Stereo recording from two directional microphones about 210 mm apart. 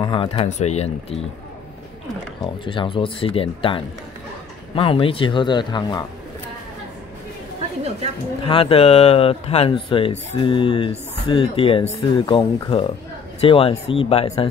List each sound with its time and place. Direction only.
0.0 s speech: 25° left (ahead or behind)
2.4 s speech: 25° left (ahead or behind)
8.5 s speech: 25° left (ahead or behind)